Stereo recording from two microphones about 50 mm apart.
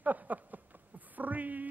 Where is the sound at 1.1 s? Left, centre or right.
Right.